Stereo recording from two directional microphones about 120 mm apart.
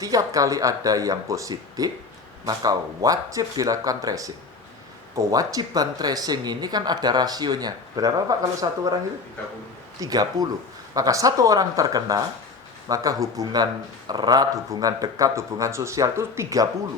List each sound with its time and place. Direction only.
0.0 s speech: 30° right (ahead or behind)
10.0 s speech: 30° right (ahead or behind)